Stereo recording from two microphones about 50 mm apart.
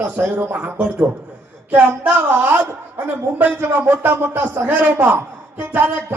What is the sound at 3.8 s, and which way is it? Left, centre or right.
A woman's voice, right.